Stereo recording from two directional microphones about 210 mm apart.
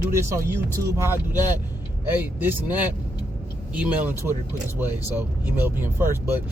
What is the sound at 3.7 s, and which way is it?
Speech, 5° right (ahead or behind).